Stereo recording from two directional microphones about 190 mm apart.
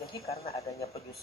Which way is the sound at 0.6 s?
15° left (ahead or behind).